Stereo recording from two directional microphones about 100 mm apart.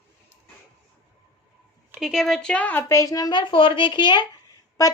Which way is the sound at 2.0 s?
5° right (ahead or behind).